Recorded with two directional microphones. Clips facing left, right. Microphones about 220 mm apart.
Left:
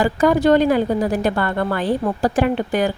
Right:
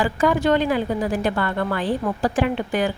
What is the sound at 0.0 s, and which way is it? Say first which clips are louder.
A woman's voice: left 4 dB; 40° left (ahead or behind).